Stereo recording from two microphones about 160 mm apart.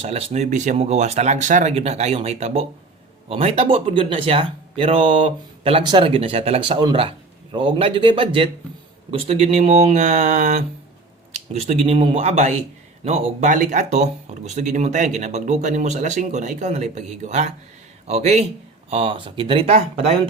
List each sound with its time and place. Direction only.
0.0 s speech: 40° right (ahead or behind)